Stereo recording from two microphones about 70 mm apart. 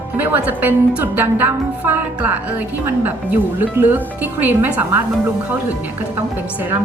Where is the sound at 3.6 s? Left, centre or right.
Right.